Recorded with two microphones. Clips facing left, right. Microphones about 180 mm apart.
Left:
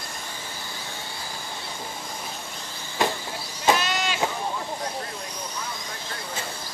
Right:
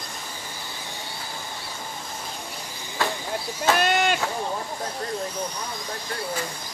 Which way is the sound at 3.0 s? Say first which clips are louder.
Left 2 dB; 20° left (ahead or behind).